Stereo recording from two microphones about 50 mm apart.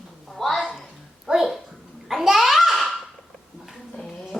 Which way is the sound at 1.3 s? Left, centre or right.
Centre.